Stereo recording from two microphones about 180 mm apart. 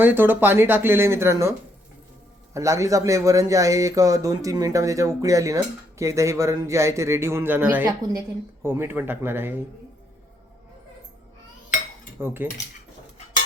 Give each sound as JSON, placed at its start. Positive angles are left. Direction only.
{"t": 0.0, "sound": "speech", "side_deg": -10}
{"t": 12.2, "sound": "speech", "side_deg": -10}